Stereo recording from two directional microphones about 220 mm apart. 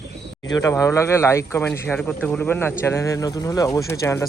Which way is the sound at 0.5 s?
15° left (ahead or behind).